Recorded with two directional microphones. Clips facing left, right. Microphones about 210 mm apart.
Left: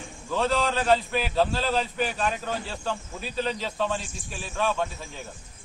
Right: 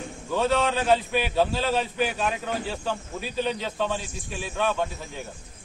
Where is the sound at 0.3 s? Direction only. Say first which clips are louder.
Right 2 dB; 5° right (ahead or behind).